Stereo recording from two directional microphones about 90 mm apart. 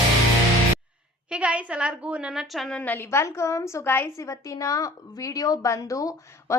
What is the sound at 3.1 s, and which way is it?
A woman's voice, 30° left (ahead or behind).